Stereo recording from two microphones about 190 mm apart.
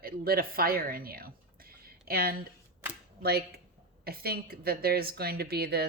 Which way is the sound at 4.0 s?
55° right (ahead or behind).